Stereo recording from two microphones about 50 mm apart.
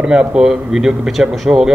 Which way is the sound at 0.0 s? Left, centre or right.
Centre.